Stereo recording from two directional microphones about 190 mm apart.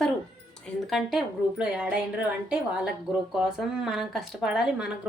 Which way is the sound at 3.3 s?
5° right (ahead or behind).